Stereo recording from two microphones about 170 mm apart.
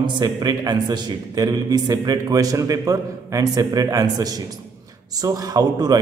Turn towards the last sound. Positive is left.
turn(degrees=-20)  # may be behind; listen again after turning